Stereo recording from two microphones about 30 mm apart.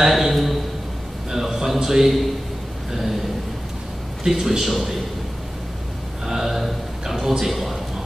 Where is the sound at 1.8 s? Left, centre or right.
Centre.